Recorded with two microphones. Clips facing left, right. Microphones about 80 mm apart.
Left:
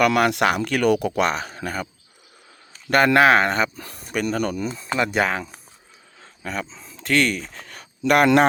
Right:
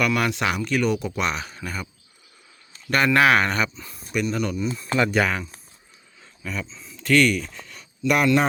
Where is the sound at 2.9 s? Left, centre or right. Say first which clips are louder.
Left 3 dB; left.